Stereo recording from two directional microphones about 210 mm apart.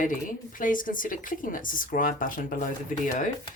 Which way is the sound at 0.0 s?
40° left (ahead or behind).